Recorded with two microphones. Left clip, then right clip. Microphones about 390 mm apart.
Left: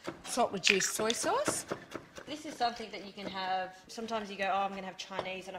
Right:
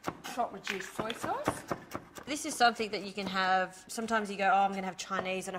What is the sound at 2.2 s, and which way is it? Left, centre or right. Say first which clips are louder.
A woman's voice: right 7 dB; right.